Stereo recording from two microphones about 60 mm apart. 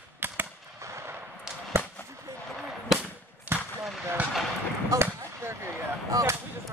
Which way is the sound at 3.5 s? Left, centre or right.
Right.